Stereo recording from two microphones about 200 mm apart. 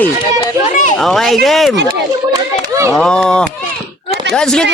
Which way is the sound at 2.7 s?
15° right (ahead or behind).